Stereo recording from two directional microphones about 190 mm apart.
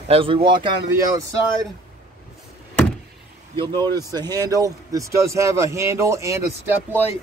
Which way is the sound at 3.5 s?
25° right (ahead or behind).